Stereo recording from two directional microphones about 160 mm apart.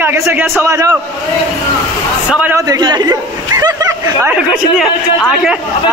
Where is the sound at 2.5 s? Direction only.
25° right (ahead or behind).